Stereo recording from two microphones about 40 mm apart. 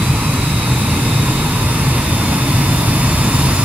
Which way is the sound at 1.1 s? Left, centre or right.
Right.